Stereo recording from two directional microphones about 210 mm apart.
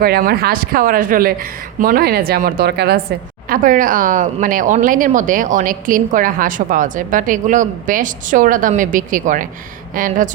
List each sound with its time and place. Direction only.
0.0 s a woman's voice: 45° right (ahead or behind)